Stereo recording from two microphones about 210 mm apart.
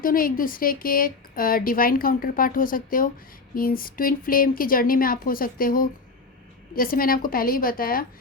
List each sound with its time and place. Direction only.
0.0 s a woman's voice: 40° left (ahead or behind)